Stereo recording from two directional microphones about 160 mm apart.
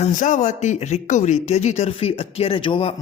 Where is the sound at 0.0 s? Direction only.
50° left (ahead or behind).